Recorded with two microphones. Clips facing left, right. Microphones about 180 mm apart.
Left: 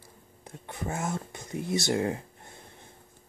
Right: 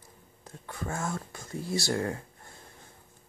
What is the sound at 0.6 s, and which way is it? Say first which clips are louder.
Speech: left 1 dB; 20° left (ahead or behind).